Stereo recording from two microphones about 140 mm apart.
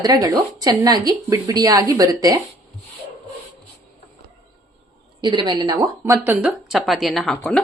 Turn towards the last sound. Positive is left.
turn(degrees=0)  # may be behind; listen again after turning